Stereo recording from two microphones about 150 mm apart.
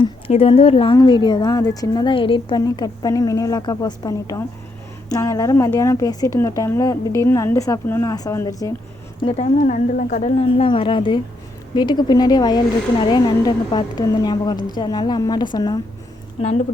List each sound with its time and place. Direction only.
0.0 s a woman's voice: 40° left (ahead or behind); by 8.7 s 20° left (ahead or behind)
9.2 s a woman's voice: 45° left (ahead or behind); by 15.8 s 25° left (ahead or behind)
16.4 s speech: 45° left (ahead or behind)